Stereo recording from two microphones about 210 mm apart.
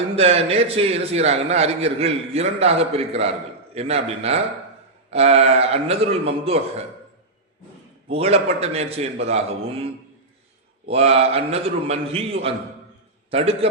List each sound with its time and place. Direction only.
0.2 s a man's voice: 30° right (ahead or behind)
8.1 s a man's voice: 30° right (ahead or behind)
10.8 s a man's voice: 30° right (ahead or behind)